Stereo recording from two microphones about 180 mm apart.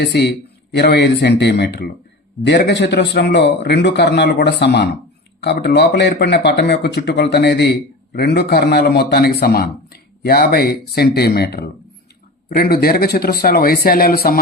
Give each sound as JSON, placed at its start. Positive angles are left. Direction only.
{"t": 0.0, "sound": "a man's voice", "side_deg": 70}